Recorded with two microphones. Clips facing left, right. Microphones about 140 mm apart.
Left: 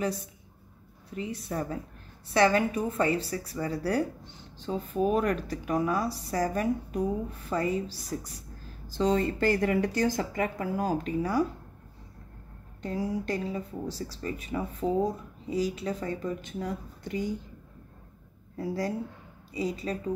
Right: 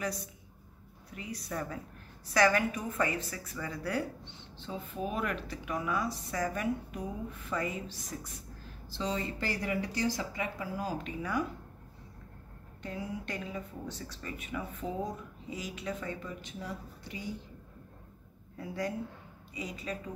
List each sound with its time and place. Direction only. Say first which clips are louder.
1.1 s a woman's voice: left 6 dB; 30° left (ahead or behind)
8.8 s speech: left 9 dB; 45° left (ahead or behind)
12.8 s speech: left 8 dB; 35° left (ahead or behind)
16.4 s speech: left 7 dB; 50° left (ahead or behind)
18.6 s speech: left 5 dB; 35° left (ahead or behind)